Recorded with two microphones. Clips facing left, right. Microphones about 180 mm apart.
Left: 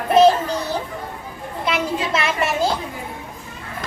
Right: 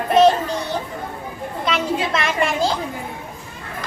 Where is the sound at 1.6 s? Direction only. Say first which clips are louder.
Even; 5° left (ahead or behind).